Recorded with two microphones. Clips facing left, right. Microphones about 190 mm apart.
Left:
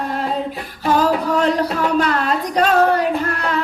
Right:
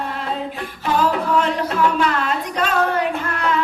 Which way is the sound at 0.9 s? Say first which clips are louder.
Left 1 dB; 40° left (ahead or behind).